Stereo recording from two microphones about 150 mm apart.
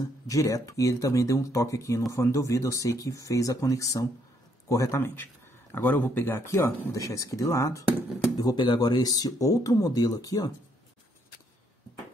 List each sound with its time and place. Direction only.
0.3 s speech: 20° left (ahead or behind)